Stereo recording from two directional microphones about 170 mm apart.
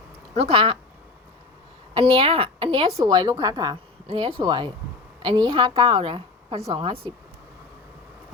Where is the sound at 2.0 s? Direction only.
30° right (ahead or behind).